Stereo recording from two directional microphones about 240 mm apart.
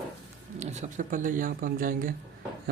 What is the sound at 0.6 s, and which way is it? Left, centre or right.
Speech, right.